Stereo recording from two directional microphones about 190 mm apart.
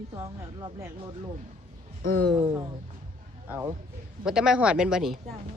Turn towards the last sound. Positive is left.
turn(degrees=0)  # may be behind; listen again after turning